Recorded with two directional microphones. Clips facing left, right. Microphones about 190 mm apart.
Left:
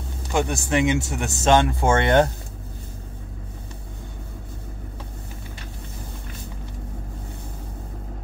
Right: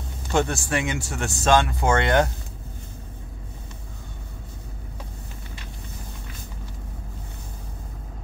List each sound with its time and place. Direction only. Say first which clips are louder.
0.3 s speech: left 1 dB; 15° left (ahead or behind)